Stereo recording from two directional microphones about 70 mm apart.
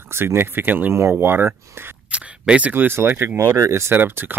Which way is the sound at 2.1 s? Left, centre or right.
Centre.